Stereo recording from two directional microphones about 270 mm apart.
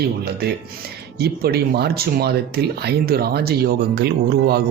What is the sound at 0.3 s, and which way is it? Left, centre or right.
Speech, right.